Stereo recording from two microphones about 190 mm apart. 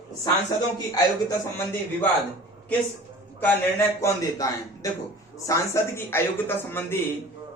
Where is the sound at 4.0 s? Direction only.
15° left (ahead or behind).